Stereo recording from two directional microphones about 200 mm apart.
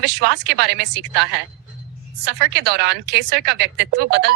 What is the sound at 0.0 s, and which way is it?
A woman's voice, 55° right (ahead or behind).